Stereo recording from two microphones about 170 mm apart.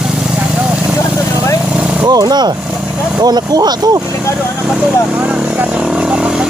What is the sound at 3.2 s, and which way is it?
Speech, 25° right (ahead or behind).